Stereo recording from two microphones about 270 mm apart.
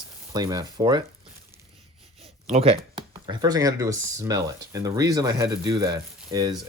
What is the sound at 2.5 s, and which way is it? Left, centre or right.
Speech, right.